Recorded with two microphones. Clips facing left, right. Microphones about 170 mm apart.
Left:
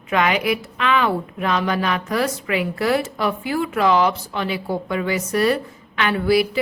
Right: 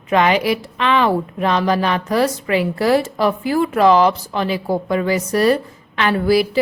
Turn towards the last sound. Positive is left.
turn(degrees=-35)  # may be behind; listen again after turning